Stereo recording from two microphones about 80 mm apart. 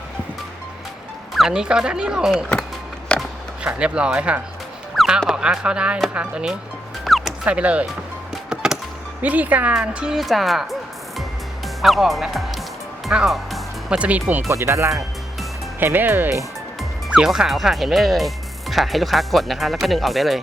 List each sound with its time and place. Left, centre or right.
1.3 s speech: centre
3.1 s a sound: centre
3.6 s speech: centre
4.9 s music: centre
5.3 s speech: centre
7.0 s music: centre
7.4 s speech: centre
8.4 s music: centre
9.2 s speech: centre
11.8 s speech: centre
13.9 s speech: centre
14.4 s speech: right
15.8 s speech: right
17.2 s speech: centre